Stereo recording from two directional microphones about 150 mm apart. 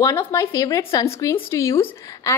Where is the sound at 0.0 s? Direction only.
20° left (ahead or behind).